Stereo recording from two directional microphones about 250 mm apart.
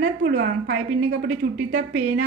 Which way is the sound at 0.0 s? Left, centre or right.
Right.